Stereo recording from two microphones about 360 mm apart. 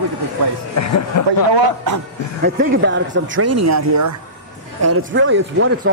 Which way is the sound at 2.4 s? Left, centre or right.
Right.